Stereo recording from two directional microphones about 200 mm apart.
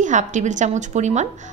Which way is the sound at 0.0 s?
35° right (ahead or behind).